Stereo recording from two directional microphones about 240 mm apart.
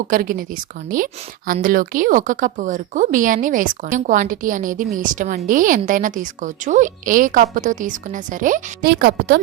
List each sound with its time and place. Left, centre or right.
0.1 s speech: right